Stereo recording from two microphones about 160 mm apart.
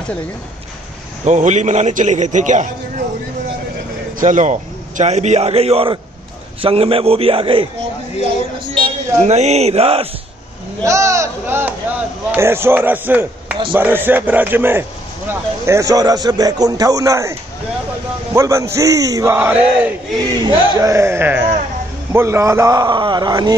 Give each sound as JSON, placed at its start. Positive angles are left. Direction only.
{"t": 1.2, "sound": "a man's voice", "side_deg": -50}
{"t": 4.2, "sound": "a man's voice", "side_deg": -50}
{"t": 9.2, "sound": "a man's voice", "side_deg": -45}
{"t": 10.8, "sound": "a man's voice", "side_deg": -20}
{"t": 19.3, "sound": "speech", "side_deg": -10}
{"t": 20.2, "sound": "a man's voice", "side_deg": -20}